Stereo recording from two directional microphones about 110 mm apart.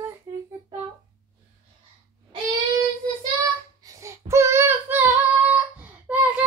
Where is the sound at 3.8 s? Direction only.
30° right (ahead or behind).